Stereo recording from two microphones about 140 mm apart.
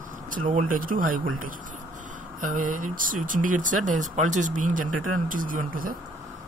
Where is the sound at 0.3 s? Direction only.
65° right (ahead or behind).